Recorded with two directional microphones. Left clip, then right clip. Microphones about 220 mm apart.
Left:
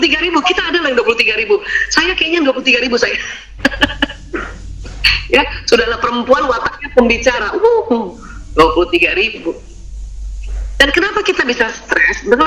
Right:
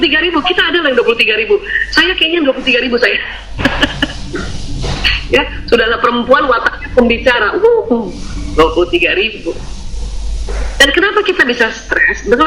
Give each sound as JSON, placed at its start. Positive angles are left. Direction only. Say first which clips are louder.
{"t": 0.0, "sound": "a sound", "louder": "right 1 dB", "side_deg": 45}
{"t": 5.0, "sound": "music", "louder": "left 1 dB", "side_deg": 45}
{"t": 8.5, "sound": "speech", "louder": "even", "side_deg": 45}
{"t": 10.8, "sound": "speech", "louder": "right 3 dB", "side_deg": 45}